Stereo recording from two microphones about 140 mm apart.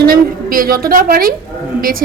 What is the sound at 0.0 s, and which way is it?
A woman's voice, 90° right.